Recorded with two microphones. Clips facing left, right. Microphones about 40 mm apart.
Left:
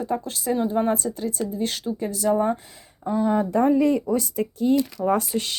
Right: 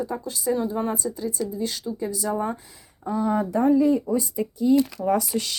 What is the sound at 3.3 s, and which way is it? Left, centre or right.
Speech, left.